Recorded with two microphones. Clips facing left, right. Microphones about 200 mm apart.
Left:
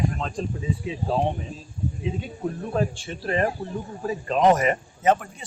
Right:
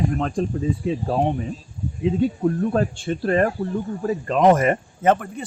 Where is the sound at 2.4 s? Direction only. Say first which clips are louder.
Right 5 dB; 55° right (ahead or behind).